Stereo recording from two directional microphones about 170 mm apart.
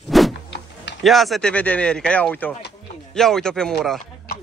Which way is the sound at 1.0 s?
Centre (ahead or behind).